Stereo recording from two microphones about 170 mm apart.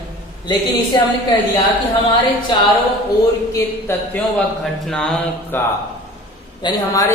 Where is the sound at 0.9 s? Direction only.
25° left (ahead or behind).